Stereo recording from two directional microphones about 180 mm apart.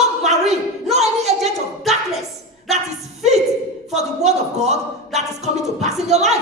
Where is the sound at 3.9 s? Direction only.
40° right (ahead or behind).